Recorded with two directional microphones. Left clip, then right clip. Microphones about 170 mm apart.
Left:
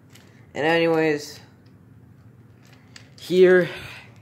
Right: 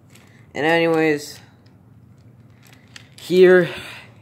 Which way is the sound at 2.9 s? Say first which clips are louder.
Right 4 dB; 20° right (ahead or behind).